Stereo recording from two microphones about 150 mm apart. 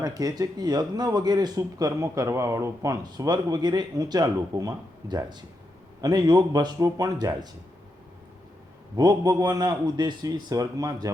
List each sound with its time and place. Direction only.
0.0 s speech: 25° right (ahead or behind)
9.0 s speech: 25° right (ahead or behind)